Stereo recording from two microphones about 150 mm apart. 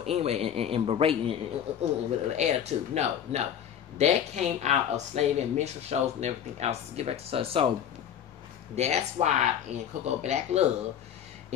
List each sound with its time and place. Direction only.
0.0 s speech: 45° right (ahead or behind)
8.7 s speech: 50° right (ahead or behind)